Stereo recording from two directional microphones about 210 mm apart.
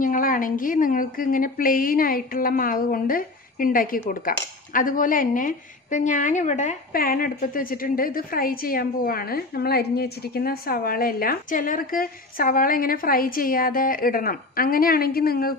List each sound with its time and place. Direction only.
0.0 s a woman's voice: 40° left (ahead or behind)